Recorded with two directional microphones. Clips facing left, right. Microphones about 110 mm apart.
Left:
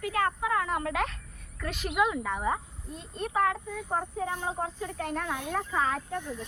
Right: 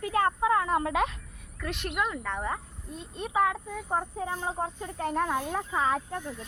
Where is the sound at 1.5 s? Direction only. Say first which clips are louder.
Left 3 dB; centre (ahead or behind).